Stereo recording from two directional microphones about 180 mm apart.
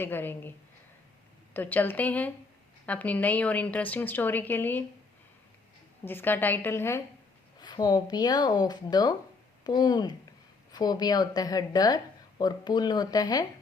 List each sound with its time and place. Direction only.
0.0 s a woman's voice: 10° left (ahead or behind)
1.5 s a woman's voice: 10° left (ahead or behind)
6.1 s a woman's voice: 10° left (ahead or behind)